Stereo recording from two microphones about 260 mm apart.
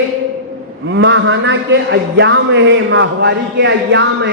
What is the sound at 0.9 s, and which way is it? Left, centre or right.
A man's voice, right.